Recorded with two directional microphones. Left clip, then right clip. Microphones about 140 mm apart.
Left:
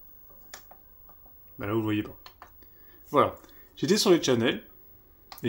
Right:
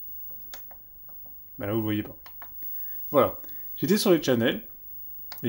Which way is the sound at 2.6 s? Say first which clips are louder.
Right 4 dB; 15° right (ahead or behind).